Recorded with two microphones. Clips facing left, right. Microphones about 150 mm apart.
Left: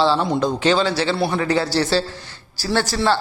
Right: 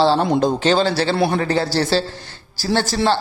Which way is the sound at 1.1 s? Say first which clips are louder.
Right 3 dB; 60° right (ahead or behind).